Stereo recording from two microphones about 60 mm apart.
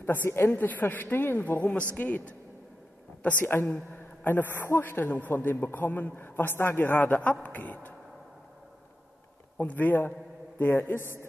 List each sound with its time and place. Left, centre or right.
0.0 s a man's voice: left
9.6 s a man's voice: left